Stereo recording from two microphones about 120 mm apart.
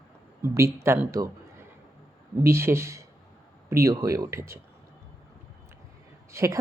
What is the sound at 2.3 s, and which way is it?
A woman's voice, 20° right (ahead or behind).